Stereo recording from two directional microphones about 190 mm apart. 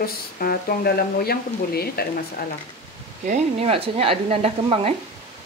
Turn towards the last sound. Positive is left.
turn(degrees=-30)  # may be behind; listen again after turning